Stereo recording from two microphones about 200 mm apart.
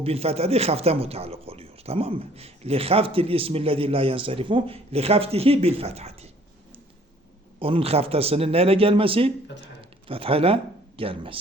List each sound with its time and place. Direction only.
0.0 s speech: 30° right (ahead or behind)
7.6 s speech: 30° right (ahead or behind)